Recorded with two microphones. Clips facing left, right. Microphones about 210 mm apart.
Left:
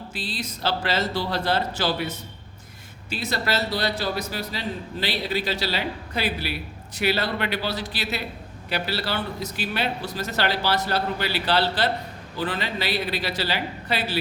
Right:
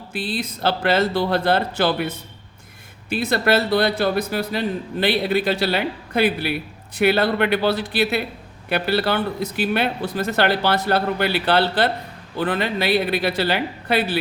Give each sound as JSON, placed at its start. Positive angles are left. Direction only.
{"t": 0.1, "sound": "a man's voice", "side_deg": -55}